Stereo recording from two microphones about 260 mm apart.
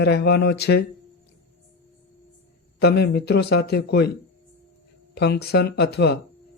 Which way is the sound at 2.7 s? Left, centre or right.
Left.